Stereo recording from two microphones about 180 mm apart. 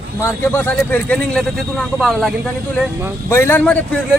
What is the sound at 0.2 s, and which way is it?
A man's voice, 15° left (ahead or behind).